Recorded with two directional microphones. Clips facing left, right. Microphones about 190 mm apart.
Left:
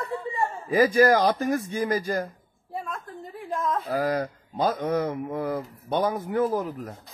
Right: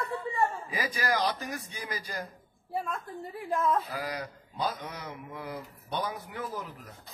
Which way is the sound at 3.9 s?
50° left (ahead or behind).